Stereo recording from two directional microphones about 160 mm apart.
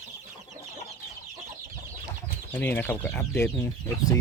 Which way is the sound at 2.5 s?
10° left (ahead or behind).